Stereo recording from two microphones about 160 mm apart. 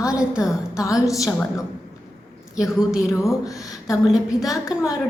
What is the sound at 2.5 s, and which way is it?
A woman's voice, 5° right (ahead or behind).